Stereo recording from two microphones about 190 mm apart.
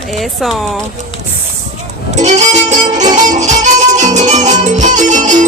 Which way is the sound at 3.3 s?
40° right (ahead or behind).